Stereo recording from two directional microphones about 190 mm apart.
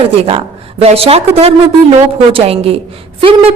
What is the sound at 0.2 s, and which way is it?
A woman's voice, 30° right (ahead or behind).